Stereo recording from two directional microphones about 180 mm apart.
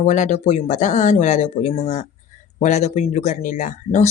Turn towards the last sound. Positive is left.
turn(degrees=45)  # may be behind; listen again after turning